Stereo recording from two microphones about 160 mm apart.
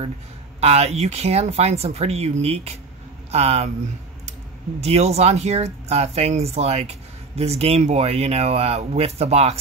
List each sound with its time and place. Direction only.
0.6 s speech: 40° right (ahead or behind)